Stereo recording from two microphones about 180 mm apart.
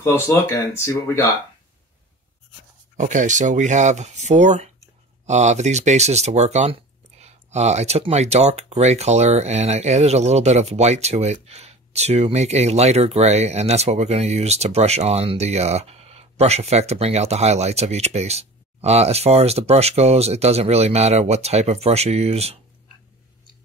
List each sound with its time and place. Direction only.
0.0 s speech: 15° left (ahead or behind)
3.0 s speech: 40° right (ahead or behind)